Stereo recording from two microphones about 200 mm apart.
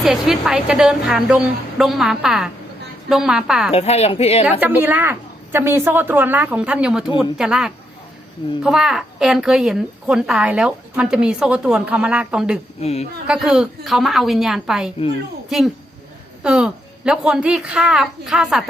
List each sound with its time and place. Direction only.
0.0 s a woman's voice: centre (ahead or behind)
3.7 s a woman's voice: 30° left (ahead or behind)
4.6 s a woman's voice: 10° right (ahead or behind)
12.8 s a woman's voice: 30° left (ahead or behind)
13.2 s a woman's voice: 5° right (ahead or behind)